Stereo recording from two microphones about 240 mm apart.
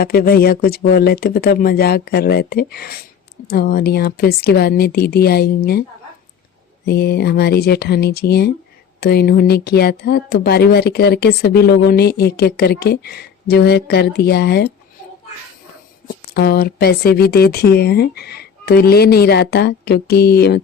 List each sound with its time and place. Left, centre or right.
0.0 s speech: left
6.8 s speech: left
16.3 s speech: left